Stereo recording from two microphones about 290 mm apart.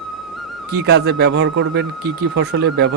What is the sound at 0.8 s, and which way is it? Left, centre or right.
Speech, right.